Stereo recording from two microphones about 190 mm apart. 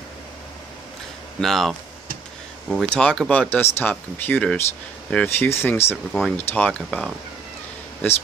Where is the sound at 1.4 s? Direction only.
Centre (ahead or behind).